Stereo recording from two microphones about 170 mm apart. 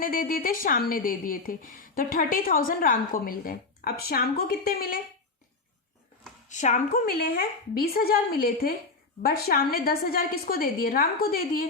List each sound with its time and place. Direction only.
0.0 s a woman's voice: 55° left (ahead or behind)
6.5 s a woman's voice: 45° left (ahead or behind)